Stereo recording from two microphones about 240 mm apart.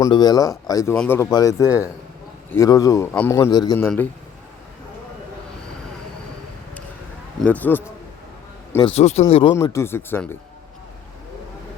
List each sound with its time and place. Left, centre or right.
0.0 s speech: centre
7.4 s speech: centre
8.9 s speech: left; by 10.3 s centre